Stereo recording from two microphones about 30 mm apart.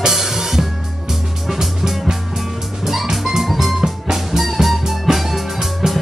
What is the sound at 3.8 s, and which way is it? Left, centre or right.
Music, centre.